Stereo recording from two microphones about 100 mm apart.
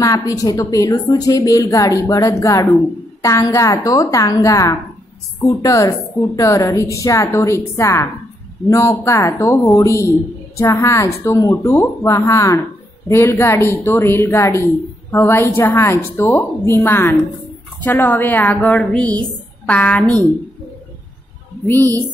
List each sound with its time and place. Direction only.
0.0 s a woman's voice: 35° left (ahead or behind); by 20.2 s 15° left (ahead or behind)